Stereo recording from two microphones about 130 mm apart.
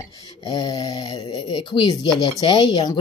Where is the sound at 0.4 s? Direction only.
30° left (ahead or behind).